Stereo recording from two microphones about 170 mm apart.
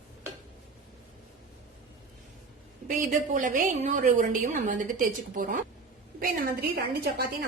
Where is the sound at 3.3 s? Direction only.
50° right (ahead or behind).